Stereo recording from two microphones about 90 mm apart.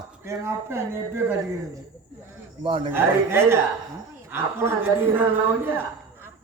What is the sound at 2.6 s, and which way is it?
Speech, 70° right (ahead or behind).